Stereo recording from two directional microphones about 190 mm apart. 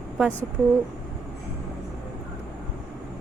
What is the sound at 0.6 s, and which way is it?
Speech, 10° right (ahead or behind).